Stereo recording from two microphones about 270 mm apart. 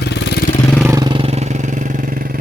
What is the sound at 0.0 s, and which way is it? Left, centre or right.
Vehicle, left.